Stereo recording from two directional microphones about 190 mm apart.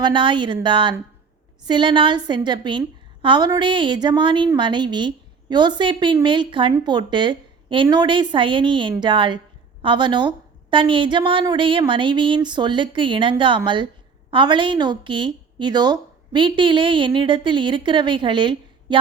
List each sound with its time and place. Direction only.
0.0 s a woman's voice: 25° right (ahead or behind)